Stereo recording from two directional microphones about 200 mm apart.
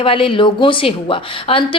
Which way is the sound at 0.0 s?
25° left (ahead or behind).